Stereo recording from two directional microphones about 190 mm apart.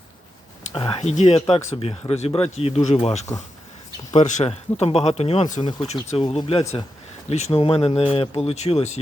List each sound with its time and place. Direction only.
0.7 s speech: 25° left (ahead or behind)